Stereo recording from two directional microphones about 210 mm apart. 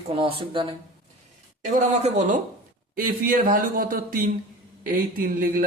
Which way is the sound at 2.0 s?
35° right (ahead or behind).